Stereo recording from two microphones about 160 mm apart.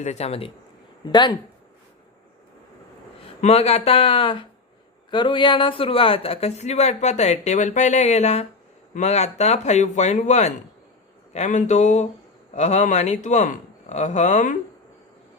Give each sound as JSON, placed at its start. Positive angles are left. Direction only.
{"t": 0.0, "sound": "speech", "side_deg": 45}
{"t": 1.0, "sound": "speech", "side_deg": 25}
{"t": 3.4, "sound": "speech", "side_deg": 40}